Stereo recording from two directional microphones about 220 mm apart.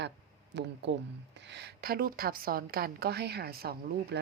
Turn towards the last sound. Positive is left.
turn(degrees=-45)  # may be behind; listen again after turning